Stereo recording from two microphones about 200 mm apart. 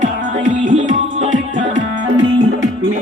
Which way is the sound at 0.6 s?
40° right (ahead or behind).